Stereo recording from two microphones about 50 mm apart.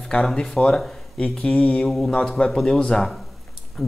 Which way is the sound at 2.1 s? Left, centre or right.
Centre.